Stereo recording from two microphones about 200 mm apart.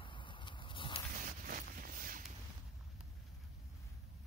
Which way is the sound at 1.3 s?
45° right (ahead or behind).